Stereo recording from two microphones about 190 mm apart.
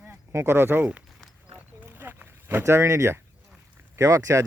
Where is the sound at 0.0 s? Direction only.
10° right (ahead or behind).